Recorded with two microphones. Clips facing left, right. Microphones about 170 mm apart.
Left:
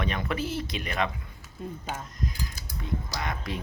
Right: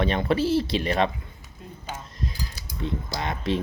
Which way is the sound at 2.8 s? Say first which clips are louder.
Right 4 dB; 25° right (ahead or behind).